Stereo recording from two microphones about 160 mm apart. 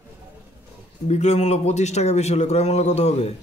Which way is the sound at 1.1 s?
45° left (ahead or behind).